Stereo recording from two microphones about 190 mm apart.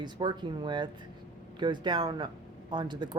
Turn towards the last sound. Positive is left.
turn(degrees=-25)  # may be behind; listen again after turning